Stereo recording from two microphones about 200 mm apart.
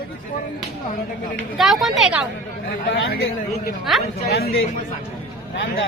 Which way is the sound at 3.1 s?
50° left (ahead or behind).